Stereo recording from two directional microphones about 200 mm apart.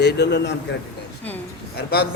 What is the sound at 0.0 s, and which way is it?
Speech, 55° left (ahead or behind).